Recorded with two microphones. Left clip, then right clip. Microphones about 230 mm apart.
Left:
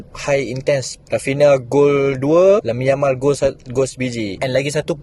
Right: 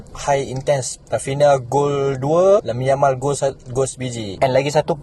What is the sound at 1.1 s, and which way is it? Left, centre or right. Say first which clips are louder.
Speech: left 2 dB; left.